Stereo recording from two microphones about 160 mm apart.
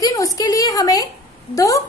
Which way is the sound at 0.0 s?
20° left (ahead or behind).